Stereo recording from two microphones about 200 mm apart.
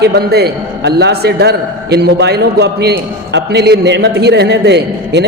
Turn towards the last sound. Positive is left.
turn(degrees=-55)  # may be behind; listen again after turning